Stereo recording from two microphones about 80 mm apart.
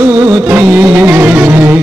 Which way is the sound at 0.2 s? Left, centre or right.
Right.